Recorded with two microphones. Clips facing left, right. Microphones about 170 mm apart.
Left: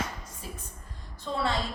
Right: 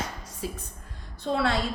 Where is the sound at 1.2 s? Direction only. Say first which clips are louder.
Right 4 dB; 70° right (ahead or behind).